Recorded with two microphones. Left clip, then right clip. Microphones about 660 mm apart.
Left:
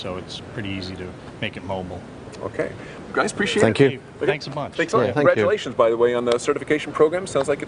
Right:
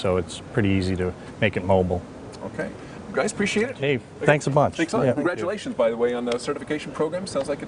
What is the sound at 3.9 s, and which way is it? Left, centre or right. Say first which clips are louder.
Speech: right 3 dB; right.